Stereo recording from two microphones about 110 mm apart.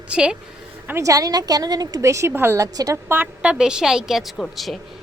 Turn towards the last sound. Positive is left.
turn(degrees=0)  # may be behind; listen again after turning